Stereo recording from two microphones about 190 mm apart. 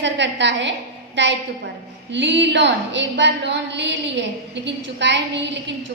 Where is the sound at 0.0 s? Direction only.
70° right (ahead or behind).